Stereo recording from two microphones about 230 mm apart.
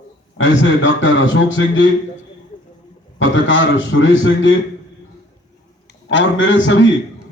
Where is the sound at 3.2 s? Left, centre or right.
Left.